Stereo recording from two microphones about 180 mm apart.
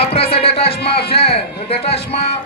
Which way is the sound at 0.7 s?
65° left (ahead or behind).